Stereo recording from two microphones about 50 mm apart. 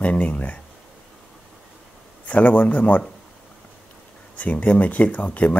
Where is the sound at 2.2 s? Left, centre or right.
Left.